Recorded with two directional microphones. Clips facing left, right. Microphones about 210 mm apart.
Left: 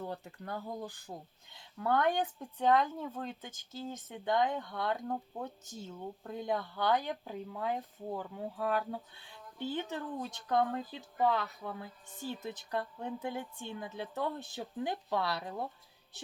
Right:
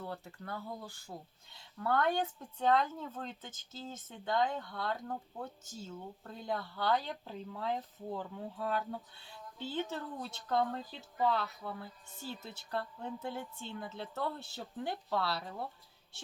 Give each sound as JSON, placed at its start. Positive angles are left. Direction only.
{"t": 0.0, "sound": "speech", "side_deg": 15}